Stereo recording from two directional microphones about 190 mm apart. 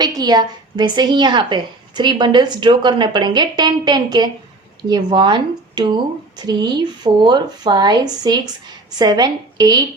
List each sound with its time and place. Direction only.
0.0 s a woman's voice: 20° right (ahead or behind)